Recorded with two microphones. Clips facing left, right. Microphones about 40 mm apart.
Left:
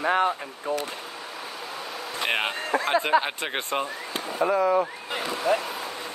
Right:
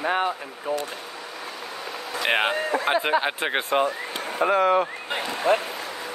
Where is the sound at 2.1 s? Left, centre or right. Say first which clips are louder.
Right 3 dB; right.